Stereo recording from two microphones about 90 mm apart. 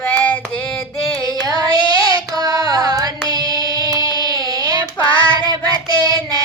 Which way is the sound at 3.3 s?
45° right (ahead or behind).